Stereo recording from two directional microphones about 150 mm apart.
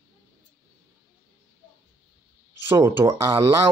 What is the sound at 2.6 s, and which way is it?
Speech, 20° right (ahead or behind).